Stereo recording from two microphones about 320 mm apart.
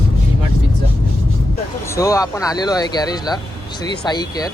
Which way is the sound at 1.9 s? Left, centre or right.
Centre.